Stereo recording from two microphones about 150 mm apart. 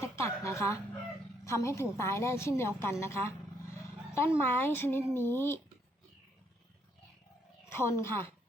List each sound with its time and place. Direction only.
0.0 s music: 20° left (ahead or behind)
1.5 s a woman's voice: 20° left (ahead or behind)
7.7 s a woman's voice: 15° left (ahead or behind)